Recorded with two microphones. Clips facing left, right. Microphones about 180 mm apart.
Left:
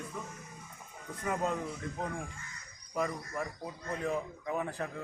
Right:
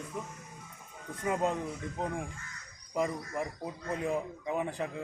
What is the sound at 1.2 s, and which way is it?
Speech, 20° right (ahead or behind).